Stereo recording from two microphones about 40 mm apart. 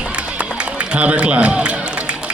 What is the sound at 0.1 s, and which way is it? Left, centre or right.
Run, right.